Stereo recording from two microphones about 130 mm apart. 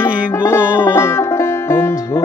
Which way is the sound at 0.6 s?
10° right (ahead or behind).